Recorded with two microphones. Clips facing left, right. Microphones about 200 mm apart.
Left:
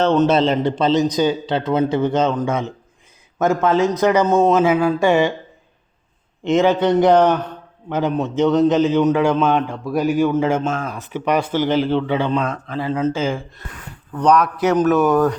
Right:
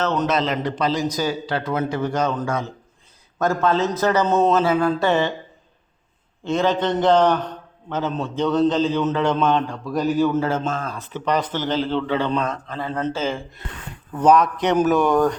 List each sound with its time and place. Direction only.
0.0 s a man's voice: 30° left (ahead or behind)
6.4 s a man's voice: 15° left (ahead or behind)
14.2 s a man's voice: centre (ahead or behind)